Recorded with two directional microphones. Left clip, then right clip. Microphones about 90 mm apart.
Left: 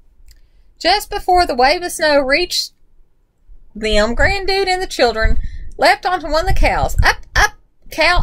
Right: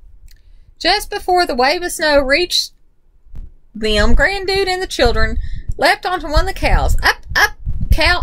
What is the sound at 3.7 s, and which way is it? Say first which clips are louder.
A child's voice: even; 35° right (ahead or behind).